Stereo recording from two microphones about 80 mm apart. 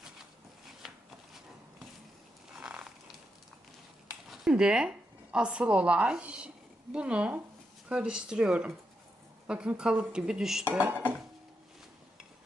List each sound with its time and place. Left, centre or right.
2.6 s a sound: centre
4.3 s a woman's voice: centre
10.7 s speech: centre